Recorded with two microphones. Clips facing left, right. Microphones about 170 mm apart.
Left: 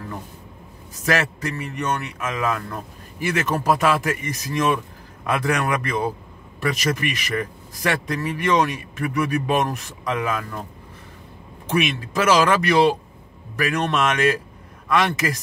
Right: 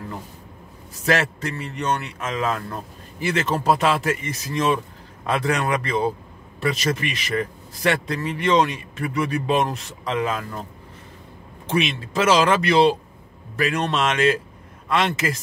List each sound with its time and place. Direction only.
1.0 s a man's voice: 30° right (ahead or behind)
11.7 s a man's voice: 25° right (ahead or behind)